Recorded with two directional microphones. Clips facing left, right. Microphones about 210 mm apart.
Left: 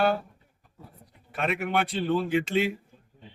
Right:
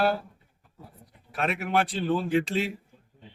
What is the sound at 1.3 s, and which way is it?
A woman's voice, centre (ahead or behind).